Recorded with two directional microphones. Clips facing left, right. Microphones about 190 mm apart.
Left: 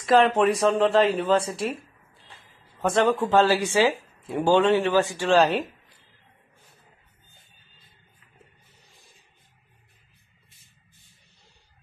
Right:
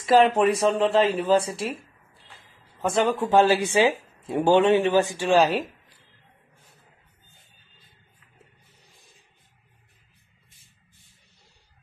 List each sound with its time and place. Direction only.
0.0 s speech: 10° right (ahead or behind)
1.4 s speech: 30° right (ahead or behind)
2.8 s speech: centre (ahead or behind)